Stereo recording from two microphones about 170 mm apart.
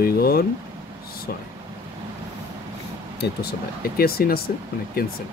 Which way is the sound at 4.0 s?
60° left (ahead or behind).